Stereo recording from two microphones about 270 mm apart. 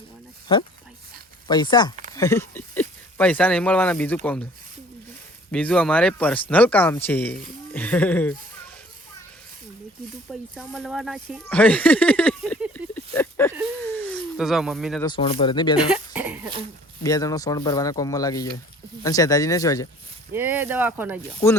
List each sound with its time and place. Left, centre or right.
1.5 s speech: centre
5.5 s speech: centre
10.5 s speech: centre
13.8 s a sound: centre
15.0 s speech: centre
16.1 s cough: centre
17.0 s speech: centre
20.3 s speech: centre
21.4 s speech: centre